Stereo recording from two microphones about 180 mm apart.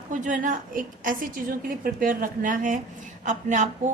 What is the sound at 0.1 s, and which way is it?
A woman's voice, 45° right (ahead or behind).